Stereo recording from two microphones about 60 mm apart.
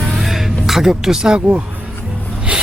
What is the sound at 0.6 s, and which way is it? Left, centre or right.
A woman's voice, centre.